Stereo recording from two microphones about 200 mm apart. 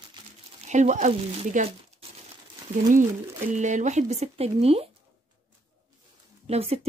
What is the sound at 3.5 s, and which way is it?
Speech, 35° right (ahead or behind).